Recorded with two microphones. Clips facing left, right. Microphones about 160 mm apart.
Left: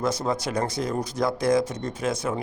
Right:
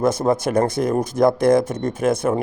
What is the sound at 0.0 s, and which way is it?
A man's voice, 50° right (ahead or behind).